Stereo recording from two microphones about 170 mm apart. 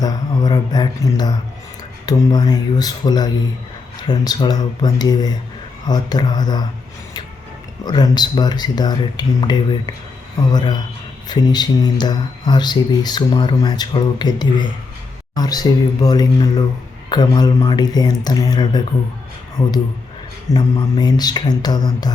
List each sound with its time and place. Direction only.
0.0 s mantra: 25° left (ahead or behind)
2.0 s speech: 25° left (ahead or behind)
7.9 s speech: 25° left (ahead or behind)
20.5 s speech: 25° left (ahead or behind)